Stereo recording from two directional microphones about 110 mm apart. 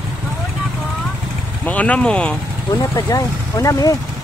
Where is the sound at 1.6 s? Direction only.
15° left (ahead or behind).